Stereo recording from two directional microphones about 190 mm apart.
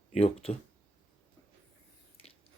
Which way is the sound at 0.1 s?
30° left (ahead or behind).